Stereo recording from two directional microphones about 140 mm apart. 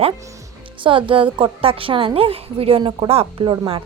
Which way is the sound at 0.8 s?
35° right (ahead or behind).